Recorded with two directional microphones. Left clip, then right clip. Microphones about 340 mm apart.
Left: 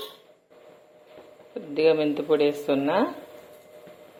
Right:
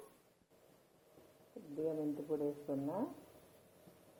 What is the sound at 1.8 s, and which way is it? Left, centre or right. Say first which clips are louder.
Speech: left 19 dB; left.